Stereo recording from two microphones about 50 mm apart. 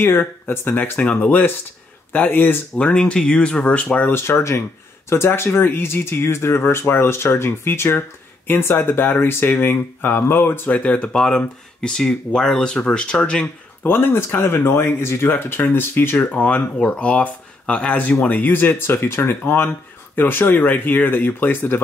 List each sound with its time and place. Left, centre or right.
0.0 s speech: left
0.9 s speech: left
2.8 s speech: left
4.1 s speech: left
10.7 s speech: left
11.1 s speech: centre
13.8 s speech: left
16.2 s speech: left
18.5 s speech: left